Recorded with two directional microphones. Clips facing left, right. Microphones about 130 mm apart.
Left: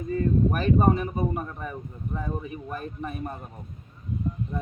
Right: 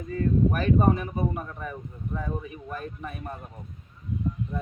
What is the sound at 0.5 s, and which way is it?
Speech, 20° left (ahead or behind).